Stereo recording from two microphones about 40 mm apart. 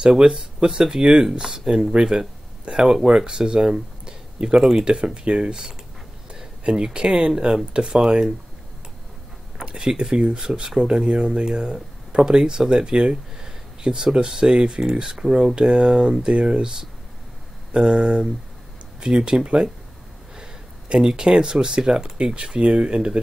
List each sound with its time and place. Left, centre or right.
0.1 s speech: centre
9.7 s speech: right
17.7 s speech: right
20.9 s speech: centre